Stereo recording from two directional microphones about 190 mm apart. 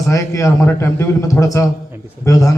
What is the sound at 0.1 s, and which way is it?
A man's voice, 15° left (ahead or behind).